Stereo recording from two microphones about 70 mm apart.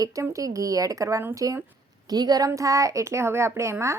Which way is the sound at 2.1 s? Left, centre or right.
Right.